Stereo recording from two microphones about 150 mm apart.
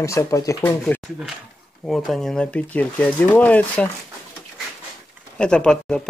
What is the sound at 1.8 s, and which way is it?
Speech, centre (ahead or behind).